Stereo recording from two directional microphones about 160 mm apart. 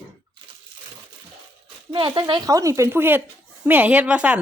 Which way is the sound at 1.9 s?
30° right (ahead or behind).